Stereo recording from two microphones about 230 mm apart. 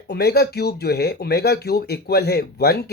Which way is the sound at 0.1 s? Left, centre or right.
Left.